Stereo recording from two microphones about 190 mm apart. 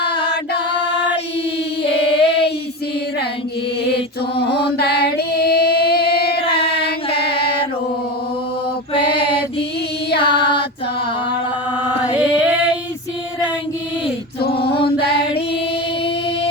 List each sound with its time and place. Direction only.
1.8 s a capella: 30° left (ahead or behind)
4.4 s mantra: 30° left (ahead or behind)
4.6 s singing: 60° left (ahead or behind)
7.3 s chant: 30° left (ahead or behind)
8.9 s mantra: 30° left (ahead or behind)
10.2 s female singing: 25° left (ahead or behind)
11.8 s chant: 10° right (ahead or behind)
14.4 s a sound: 55° left (ahead or behind)
14.8 s music: 30° left (ahead or behind)